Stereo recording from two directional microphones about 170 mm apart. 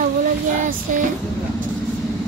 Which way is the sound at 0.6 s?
50° right (ahead or behind).